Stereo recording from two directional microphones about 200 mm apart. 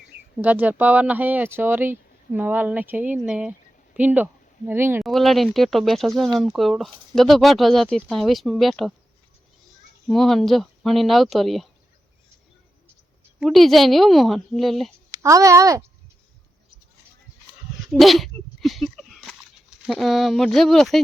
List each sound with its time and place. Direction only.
0.4 s speech: 10° right (ahead or behind)
5.0 s speech: centre (ahead or behind)
10.1 s speech: centre (ahead or behind)
13.4 s speech: centre (ahead or behind)
15.1 s speech: 15° right (ahead or behind)
17.8 s a sound: centre (ahead or behind)
19.8 s speech: centre (ahead or behind)